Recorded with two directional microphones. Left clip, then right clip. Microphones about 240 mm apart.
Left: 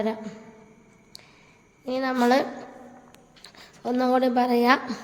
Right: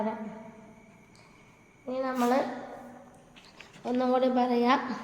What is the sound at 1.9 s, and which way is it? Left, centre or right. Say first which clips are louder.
Speech: left 6 dB; left.